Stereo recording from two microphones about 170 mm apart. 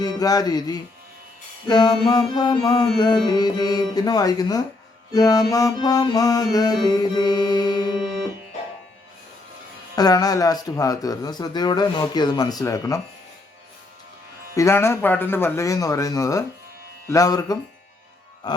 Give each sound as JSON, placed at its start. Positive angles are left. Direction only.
{"t": 0.0, "sound": "speech", "side_deg": 20}
{"t": 9.9, "sound": "speech", "side_deg": 20}
{"t": 14.5, "sound": "speech", "side_deg": 15}